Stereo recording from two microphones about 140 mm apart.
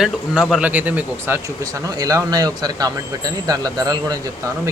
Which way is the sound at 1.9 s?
25° right (ahead or behind).